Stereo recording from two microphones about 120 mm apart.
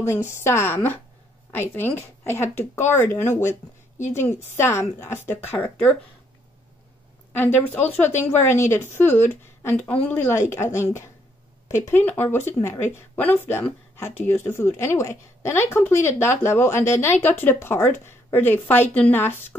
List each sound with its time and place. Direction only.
0.0 s speech: 20° left (ahead or behind)
7.3 s a woman's voice: 15° left (ahead or behind)